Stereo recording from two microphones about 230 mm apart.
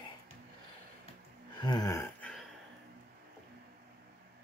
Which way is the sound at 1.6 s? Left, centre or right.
Centre.